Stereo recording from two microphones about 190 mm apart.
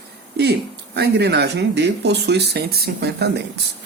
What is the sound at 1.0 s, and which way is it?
Speech, 60° right (ahead or behind).